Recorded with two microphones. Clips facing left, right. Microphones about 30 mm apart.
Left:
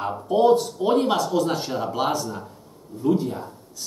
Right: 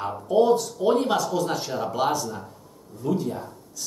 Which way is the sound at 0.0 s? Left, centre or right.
Centre.